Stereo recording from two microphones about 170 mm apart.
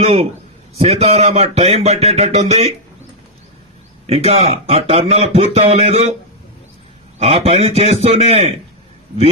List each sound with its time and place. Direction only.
0.0 s speech: 40° right (ahead or behind)
4.0 s speech: 35° right (ahead or behind)
7.2 s speech: 35° right (ahead or behind)